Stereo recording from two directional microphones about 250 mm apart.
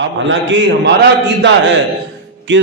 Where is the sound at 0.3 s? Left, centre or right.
Right.